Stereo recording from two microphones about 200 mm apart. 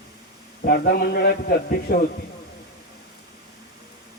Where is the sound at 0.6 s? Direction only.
50° left (ahead or behind).